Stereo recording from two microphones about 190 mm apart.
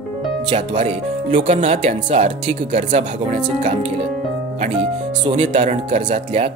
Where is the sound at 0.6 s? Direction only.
40° right (ahead or behind).